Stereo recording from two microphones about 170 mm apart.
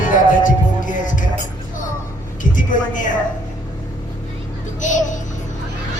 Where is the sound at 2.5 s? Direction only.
50° left (ahead or behind).